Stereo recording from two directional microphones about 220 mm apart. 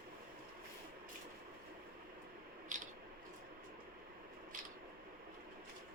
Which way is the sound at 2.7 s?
35° right (ahead or behind).